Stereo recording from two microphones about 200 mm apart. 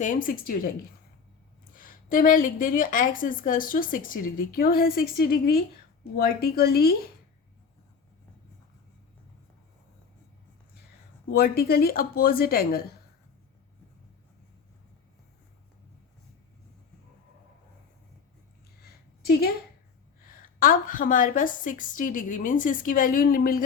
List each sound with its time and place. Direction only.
0.0 s a woman's voice: 40° left (ahead or behind)
1.7 s a woman's voice: 45° left (ahead or behind)
11.3 s a woman's voice: 50° left (ahead or behind)
18.8 s a sound: 50° left (ahead or behind)
20.6 s a woman's voice: 45° left (ahead or behind)